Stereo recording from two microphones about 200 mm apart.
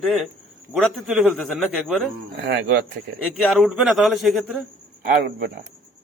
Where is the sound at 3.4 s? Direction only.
5° left (ahead or behind).